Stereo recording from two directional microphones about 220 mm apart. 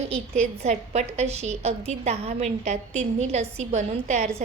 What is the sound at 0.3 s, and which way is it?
A woman's voice, 30° right (ahead or behind).